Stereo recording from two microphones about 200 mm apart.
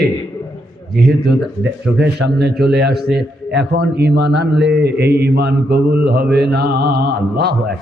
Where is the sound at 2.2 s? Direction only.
55° right (ahead or behind).